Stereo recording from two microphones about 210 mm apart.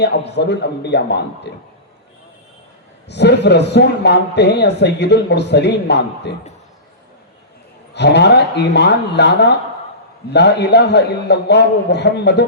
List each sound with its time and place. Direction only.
0.0 s speech: 55° left (ahead or behind)
3.1 s speech: 55° left (ahead or behind)
7.9 s speech: 55° left (ahead or behind)